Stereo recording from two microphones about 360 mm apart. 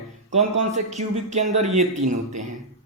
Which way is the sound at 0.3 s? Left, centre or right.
Centre.